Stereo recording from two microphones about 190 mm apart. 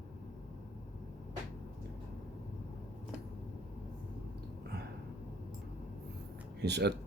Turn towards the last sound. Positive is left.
turn(degrees=-60)  # may be behind; listen again after turning